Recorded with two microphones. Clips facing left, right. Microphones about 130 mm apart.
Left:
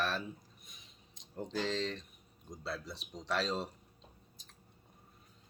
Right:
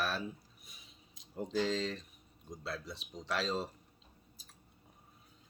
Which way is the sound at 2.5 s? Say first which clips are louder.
Even; centre (ahead or behind).